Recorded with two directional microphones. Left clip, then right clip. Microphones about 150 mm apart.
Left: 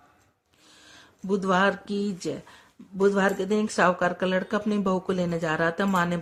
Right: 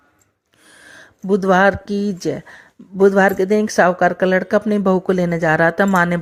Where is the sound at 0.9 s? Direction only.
40° right (ahead or behind).